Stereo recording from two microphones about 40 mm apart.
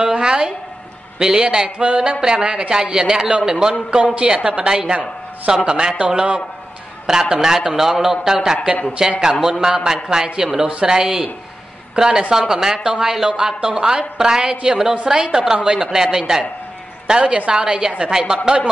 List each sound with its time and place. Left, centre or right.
0.0 s a sound: right
1.2 s a woman's voice: centre
18.1 s a man's voice: centre